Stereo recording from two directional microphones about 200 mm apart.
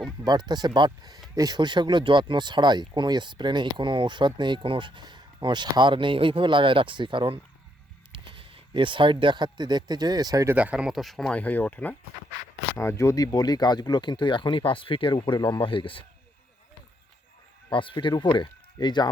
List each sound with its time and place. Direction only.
0.3 s speech: 20° right (ahead or behind); by 16.0 s 25° left (ahead or behind)
17.7 s speech: 25° left (ahead or behind)